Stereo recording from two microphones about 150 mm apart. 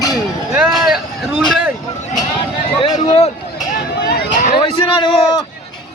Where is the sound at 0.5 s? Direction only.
5° right (ahead or behind).